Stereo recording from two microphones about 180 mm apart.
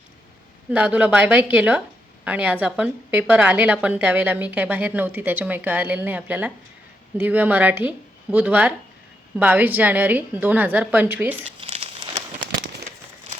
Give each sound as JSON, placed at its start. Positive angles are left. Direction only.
{"t": 0.7, "sound": "a woman's voice", "side_deg": -10}
{"t": 11.6, "sound": "crumpling", "side_deg": -30}